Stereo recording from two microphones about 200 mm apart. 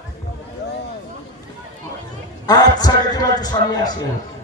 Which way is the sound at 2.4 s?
20° left (ahead or behind).